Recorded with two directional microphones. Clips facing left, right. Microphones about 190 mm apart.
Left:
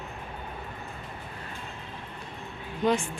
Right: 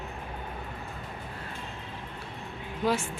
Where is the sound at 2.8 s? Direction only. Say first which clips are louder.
Left 2 dB; 5° right (ahead or behind).